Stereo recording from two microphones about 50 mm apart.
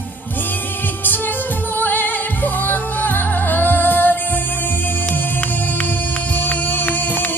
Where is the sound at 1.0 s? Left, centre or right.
Left.